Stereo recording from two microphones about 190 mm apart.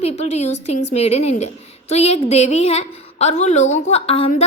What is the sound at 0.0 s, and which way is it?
A woman's voice, 35° left (ahead or behind).